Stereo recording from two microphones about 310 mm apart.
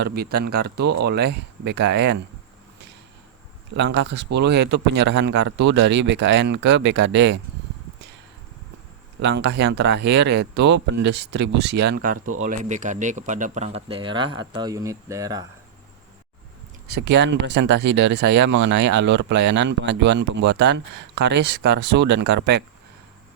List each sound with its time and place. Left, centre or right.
0.0 s speech: right
3.8 s speech: right
9.2 s speech: right; by 15.4 s centre
16.8 s speech: right